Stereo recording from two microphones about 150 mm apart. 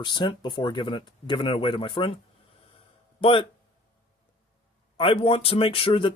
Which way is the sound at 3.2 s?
35° left (ahead or behind).